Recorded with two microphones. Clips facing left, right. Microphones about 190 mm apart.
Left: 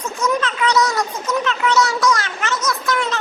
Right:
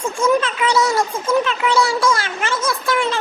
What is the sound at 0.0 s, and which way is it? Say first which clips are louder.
A child's voice: right 4 dB; 25° right (ahead or behind).